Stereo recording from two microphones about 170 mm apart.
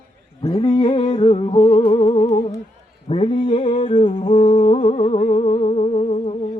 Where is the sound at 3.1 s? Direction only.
35° left (ahead or behind).